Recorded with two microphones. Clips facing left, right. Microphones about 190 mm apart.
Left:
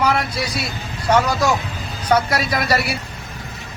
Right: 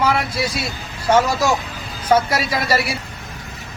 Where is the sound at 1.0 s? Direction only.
25° right (ahead or behind).